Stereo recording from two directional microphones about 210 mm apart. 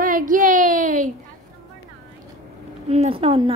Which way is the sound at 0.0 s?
40° right (ahead or behind).